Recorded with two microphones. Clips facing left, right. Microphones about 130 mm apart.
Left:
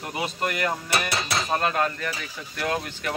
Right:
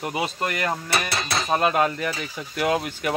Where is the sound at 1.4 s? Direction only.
10° right (ahead or behind).